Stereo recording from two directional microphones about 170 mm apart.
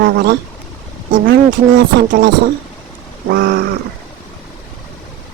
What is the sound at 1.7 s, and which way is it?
Speech, 60° right (ahead or behind).